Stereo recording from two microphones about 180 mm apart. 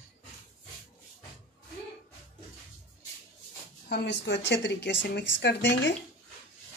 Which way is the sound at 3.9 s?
70° left (ahead or behind).